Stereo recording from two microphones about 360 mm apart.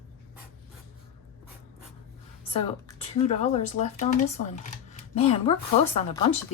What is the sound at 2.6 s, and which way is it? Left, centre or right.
Speech, centre.